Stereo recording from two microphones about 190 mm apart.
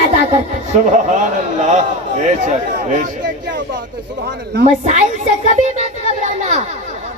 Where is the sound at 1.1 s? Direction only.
40° right (ahead or behind).